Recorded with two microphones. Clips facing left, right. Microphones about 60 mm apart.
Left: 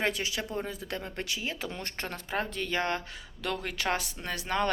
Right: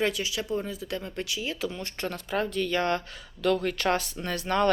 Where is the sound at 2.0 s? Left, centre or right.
Left.